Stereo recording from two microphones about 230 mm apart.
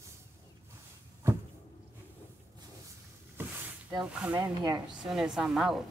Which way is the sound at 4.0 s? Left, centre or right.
Centre.